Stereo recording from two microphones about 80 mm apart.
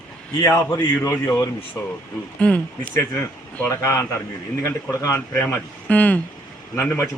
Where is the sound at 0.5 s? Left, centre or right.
Left.